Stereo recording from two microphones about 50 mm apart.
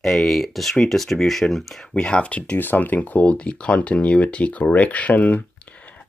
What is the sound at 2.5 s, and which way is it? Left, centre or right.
Speech, left.